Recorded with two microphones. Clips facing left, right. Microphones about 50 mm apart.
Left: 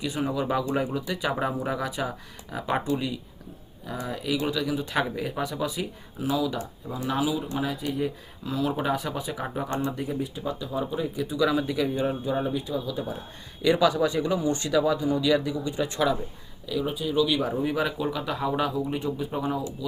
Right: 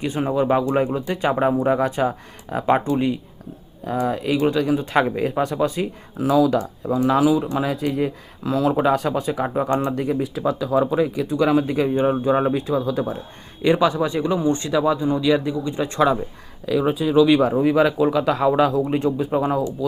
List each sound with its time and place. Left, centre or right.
0.0 s speech: right
13.6 s speech: right
16.7 s speech: right